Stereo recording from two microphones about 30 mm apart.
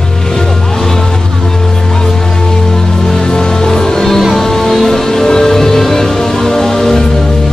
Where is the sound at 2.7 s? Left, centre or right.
Left.